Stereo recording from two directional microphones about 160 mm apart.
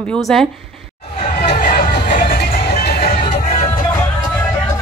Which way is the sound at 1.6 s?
65° left (ahead or behind).